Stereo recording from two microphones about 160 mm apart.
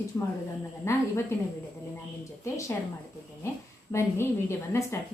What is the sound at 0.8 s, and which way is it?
Speech, 15° left (ahead or behind).